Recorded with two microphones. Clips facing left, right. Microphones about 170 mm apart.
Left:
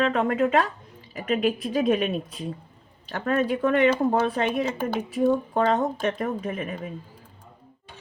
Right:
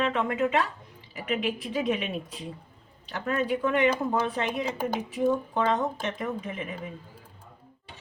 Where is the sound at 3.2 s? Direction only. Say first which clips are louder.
Left 4 dB; 50° left (ahead or behind).